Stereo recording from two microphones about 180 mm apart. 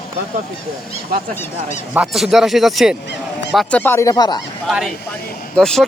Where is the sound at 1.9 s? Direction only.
5° right (ahead or behind).